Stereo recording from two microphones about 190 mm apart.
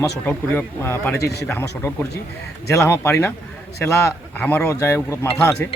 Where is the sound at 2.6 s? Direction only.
15° left (ahead or behind).